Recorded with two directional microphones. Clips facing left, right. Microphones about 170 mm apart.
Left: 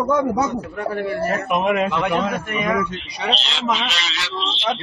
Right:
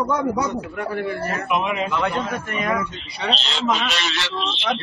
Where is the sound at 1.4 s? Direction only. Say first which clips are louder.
Left 3 dB; 50° left (ahead or behind).